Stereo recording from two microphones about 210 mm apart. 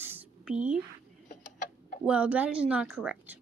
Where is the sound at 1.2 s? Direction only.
35° left (ahead or behind).